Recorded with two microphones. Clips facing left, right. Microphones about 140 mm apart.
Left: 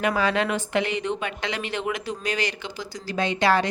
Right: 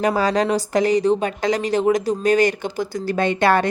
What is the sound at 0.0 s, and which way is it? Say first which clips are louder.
Speech: right 5 dB; 40° right (ahead or behind).